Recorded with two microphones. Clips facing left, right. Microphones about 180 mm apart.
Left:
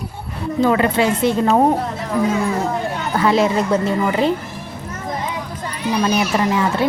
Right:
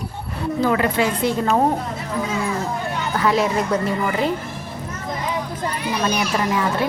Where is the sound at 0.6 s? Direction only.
25° left (ahead or behind).